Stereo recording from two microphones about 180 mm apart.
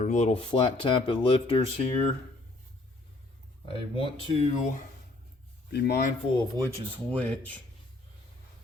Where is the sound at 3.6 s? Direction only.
30° left (ahead or behind).